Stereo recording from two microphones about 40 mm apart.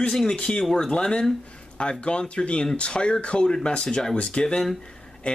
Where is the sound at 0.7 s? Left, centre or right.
Centre.